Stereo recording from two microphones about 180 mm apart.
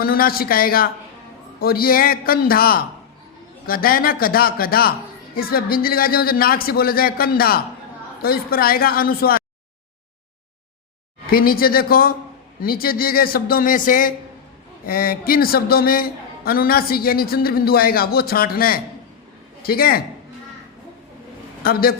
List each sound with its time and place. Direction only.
0.0 s a man's voice: 55° left (ahead or behind)
11.3 s a man's voice: 55° left (ahead or behind)
21.6 s a man's voice: 55° left (ahead or behind)